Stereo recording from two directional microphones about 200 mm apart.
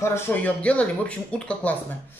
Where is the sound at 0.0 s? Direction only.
10° left (ahead or behind).